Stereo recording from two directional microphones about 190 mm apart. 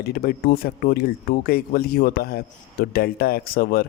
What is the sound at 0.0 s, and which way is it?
Speech, 55° left (ahead or behind).